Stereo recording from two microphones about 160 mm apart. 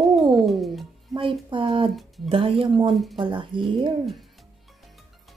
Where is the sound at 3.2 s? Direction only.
30° right (ahead or behind).